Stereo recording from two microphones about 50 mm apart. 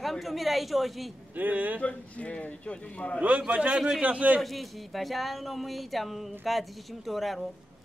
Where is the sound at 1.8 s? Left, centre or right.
Left.